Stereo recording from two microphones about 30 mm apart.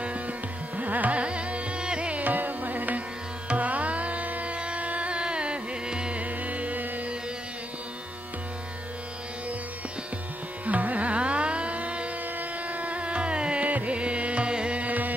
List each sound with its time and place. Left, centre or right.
0.7 s classical music: right
1.2 s carnatic music: right
2.1 s music: right
3.4 s music: right
4.6 s music: right
4.8 s music: right
5.1 s carnatic music: right
6.1 s music: right
10.6 s carnatic music: right
12.4 s music: right
14.5 s music: right
14.8 s music: right